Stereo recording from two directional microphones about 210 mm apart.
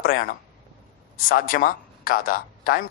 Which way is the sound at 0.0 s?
45° left (ahead or behind).